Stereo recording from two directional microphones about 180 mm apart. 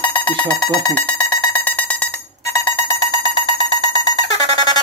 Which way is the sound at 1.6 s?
10° left (ahead or behind).